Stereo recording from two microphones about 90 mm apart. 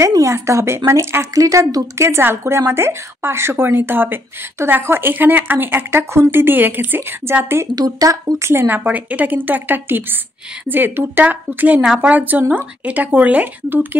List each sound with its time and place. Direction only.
0.0 s speech: 35° right (ahead or behind)
7.7 s a woman's voice: 40° right (ahead or behind); by 13.8 s 20° right (ahead or behind)